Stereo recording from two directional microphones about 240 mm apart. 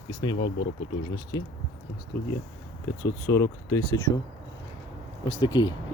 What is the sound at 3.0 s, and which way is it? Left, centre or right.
Speech, centre.